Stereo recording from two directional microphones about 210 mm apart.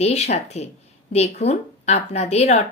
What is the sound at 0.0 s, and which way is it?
Speech, 30° left (ahead or behind).